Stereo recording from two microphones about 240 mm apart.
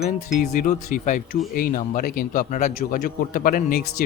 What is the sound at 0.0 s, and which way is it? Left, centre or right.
A man's voice, left.